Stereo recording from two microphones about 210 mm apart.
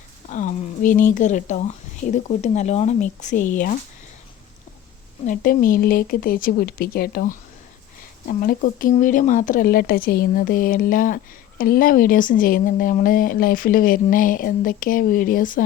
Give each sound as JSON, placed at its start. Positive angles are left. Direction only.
{"t": 0.3, "sound": "speech", "side_deg": 35}
{"t": 5.2, "sound": "speech", "side_deg": 40}